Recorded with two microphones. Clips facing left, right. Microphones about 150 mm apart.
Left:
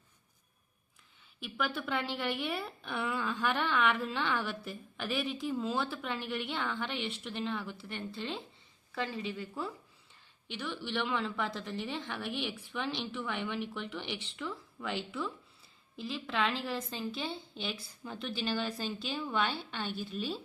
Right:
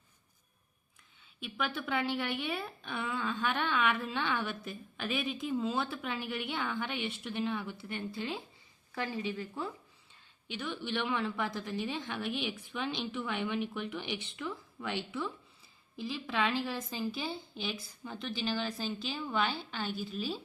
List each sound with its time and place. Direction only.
1.4 s a woman's voice: centre (ahead or behind)